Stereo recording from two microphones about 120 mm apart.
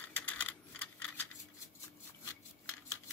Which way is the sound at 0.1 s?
10° left (ahead or behind).